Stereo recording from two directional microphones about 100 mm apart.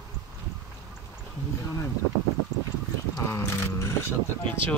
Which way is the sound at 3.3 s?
25° left (ahead or behind).